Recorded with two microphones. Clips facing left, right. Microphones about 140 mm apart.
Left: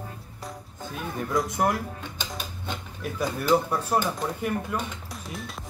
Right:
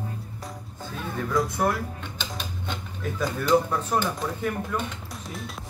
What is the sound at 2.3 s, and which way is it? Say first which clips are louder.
Speech: right 1 dB; 5° left (ahead or behind).